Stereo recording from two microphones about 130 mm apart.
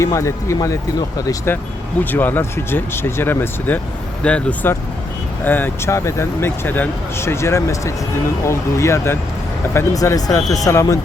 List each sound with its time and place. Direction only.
0.0 s speech: 25° left (ahead or behind)